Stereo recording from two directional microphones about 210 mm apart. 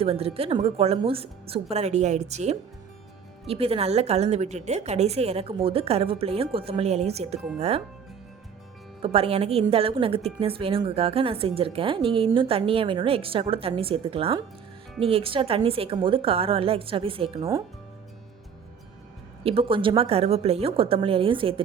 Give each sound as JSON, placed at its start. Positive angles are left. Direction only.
{"t": 0.0, "sound": "a woman's voice", "side_deg": -25}
{"t": 9.0, "sound": "a woman's voice", "side_deg": -30}
{"t": 19.5, "sound": "a woman's voice", "side_deg": -25}